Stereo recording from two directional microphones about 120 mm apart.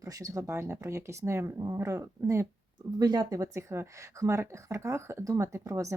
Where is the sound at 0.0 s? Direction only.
30° right (ahead or behind).